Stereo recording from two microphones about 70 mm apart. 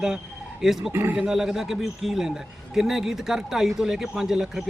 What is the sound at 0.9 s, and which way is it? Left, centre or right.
Speech, right.